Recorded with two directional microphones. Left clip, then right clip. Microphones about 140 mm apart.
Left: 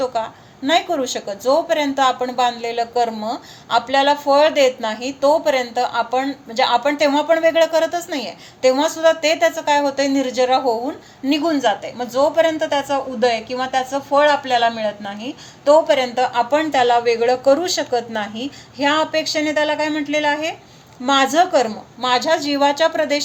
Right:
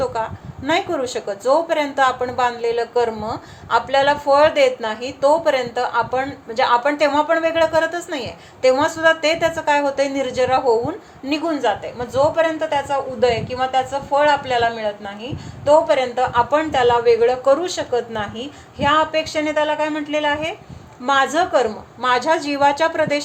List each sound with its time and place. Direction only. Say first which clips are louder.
0.0 s a woman's voice: left 1 dB; 35° left (ahead or behind)